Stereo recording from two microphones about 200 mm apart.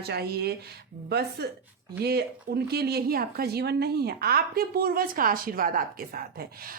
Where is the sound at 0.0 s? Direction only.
55° right (ahead or behind).